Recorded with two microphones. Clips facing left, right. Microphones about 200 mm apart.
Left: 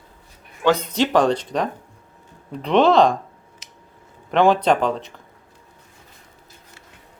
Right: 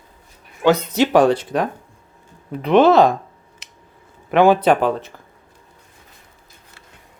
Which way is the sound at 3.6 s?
60° right (ahead or behind).